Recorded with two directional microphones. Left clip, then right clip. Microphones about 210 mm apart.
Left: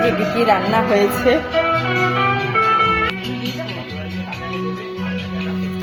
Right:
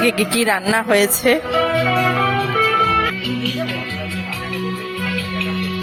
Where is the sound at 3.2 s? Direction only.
30° left (ahead or behind).